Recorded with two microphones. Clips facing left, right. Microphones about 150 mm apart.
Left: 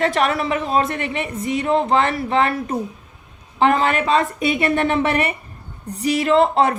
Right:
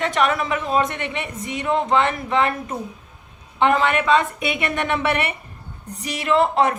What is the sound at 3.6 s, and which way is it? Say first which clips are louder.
A woman's voice: left 1 dB; 35° left (ahead or behind).